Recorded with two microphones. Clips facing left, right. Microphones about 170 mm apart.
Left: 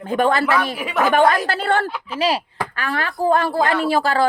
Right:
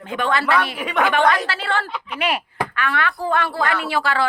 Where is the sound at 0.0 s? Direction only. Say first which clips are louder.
Left 4 dB; 40° left (ahead or behind).